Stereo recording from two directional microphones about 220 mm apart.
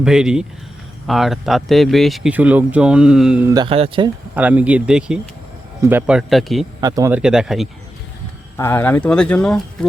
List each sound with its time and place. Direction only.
0.0 s speech: 5° right (ahead or behind)
3.5 s speech: 20° right (ahead or behind)
4.4 s speech: 5° right (ahead or behind)
6.8 s speech: 15° right (ahead or behind)
8.5 s speech: 10° left (ahead or behind)